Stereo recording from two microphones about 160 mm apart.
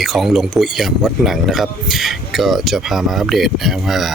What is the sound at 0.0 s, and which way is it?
Speech, centre (ahead or behind).